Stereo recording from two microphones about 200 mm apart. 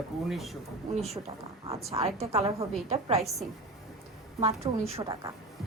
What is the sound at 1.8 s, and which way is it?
A woman's voice, 30° right (ahead or behind).